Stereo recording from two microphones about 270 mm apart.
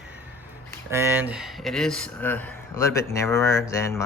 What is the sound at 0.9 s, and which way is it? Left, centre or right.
Speech, centre.